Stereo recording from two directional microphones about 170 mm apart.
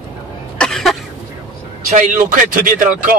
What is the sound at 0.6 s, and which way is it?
Cough, 5° left (ahead or behind).